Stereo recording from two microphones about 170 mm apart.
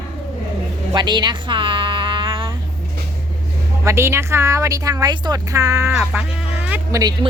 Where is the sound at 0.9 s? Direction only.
25° right (ahead or behind).